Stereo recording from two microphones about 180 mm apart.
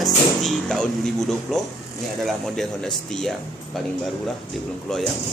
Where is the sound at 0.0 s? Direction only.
Centre (ahead or behind).